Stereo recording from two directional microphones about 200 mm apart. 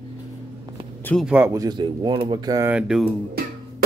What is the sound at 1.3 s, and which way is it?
Speech, 10° right (ahead or behind).